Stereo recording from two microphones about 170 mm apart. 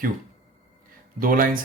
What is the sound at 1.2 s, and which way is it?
Speech, 55° right (ahead or behind).